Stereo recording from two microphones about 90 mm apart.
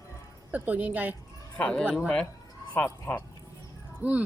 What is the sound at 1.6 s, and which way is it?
Speech, 10° left (ahead or behind).